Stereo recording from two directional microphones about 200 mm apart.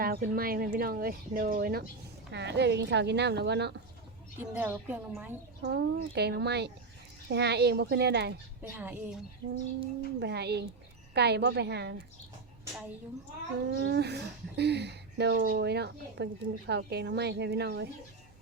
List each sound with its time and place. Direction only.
0.0 s speech: 45° right (ahead or behind)
4.4 s a woman's voice: 10° right (ahead or behind)
5.6 s speech: 55° right (ahead or behind)
8.6 s a woman's voice: 10° right (ahead or behind)
10.2 s speech: 55° right (ahead or behind)
13.7 s speech: 60° right (ahead or behind)